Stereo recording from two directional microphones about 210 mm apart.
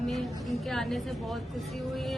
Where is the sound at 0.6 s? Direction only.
Centre (ahead or behind).